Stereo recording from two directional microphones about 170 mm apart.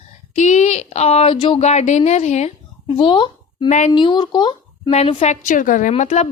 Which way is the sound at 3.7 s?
45° left (ahead or behind).